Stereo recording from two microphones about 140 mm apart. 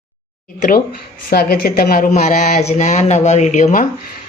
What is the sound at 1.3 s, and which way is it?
Speech, 90° left.